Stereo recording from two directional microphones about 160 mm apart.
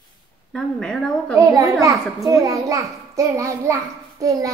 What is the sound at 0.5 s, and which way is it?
Speech, 5° left (ahead or behind).